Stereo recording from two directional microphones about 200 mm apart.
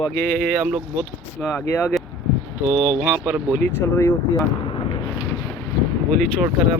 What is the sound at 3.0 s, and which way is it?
Speech, 5° right (ahead or behind).